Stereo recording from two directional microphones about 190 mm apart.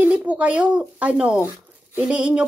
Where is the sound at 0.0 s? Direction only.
5° right (ahead or behind).